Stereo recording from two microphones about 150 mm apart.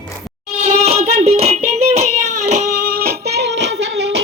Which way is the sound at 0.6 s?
45° right (ahead or behind).